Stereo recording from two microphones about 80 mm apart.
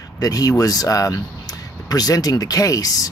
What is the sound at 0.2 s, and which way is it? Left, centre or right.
Speech, left.